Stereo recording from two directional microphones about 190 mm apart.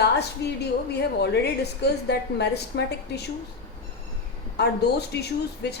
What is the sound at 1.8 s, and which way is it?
Speech, 65° left (ahead or behind).